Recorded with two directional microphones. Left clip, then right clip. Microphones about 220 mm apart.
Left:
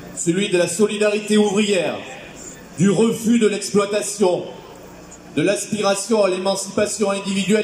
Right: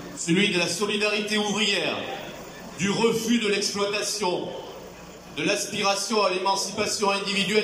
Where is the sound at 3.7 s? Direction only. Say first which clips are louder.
Left 7 dB; 50° left (ahead or behind).